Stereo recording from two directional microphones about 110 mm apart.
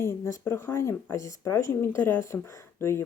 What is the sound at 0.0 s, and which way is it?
Speech, 20° left (ahead or behind).